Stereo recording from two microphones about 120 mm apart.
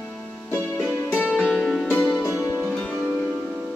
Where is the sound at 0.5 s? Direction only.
15° left (ahead or behind).